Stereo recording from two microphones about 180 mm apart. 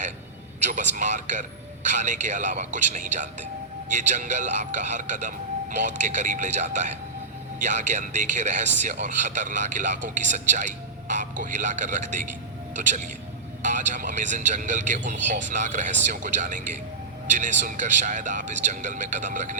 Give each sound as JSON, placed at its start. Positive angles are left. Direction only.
{"t": 0.6, "sound": "speech", "side_deg": -45}